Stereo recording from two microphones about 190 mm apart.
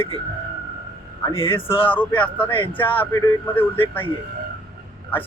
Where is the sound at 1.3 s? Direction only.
30° left (ahead or behind).